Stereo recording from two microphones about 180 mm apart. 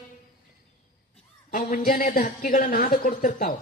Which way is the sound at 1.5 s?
50° left (ahead or behind).